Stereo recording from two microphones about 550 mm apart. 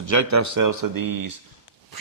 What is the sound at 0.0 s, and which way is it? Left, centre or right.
Speech, right.